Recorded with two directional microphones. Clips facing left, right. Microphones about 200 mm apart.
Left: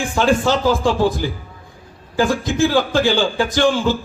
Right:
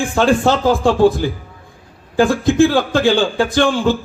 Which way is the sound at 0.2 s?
55° right (ahead or behind).